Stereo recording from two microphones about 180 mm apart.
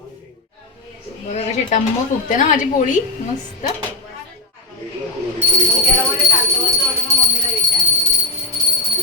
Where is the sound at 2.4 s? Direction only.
45° left (ahead or behind).